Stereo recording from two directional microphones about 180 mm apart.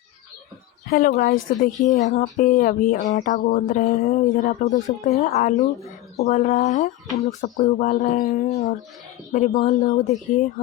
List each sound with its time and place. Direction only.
0.9 s speech: 55° left (ahead or behind)